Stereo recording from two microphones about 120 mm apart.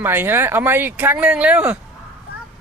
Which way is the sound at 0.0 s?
15° right (ahead or behind).